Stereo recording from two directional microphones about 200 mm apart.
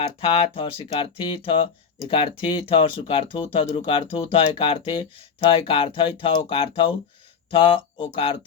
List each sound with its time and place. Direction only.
0.0 s speech: 25° left (ahead or behind)